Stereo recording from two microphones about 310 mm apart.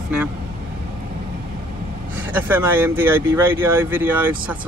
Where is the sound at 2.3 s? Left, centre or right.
Centre.